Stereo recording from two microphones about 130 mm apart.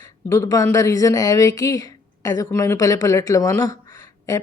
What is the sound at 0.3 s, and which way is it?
A woman's voice, 20° left (ahead or behind).